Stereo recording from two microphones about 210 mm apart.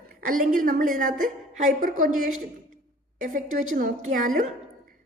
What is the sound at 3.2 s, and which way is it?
A woman's voice, 40° right (ahead or behind).